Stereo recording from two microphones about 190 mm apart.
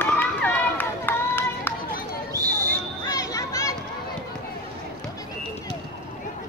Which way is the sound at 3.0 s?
20° left (ahead or behind).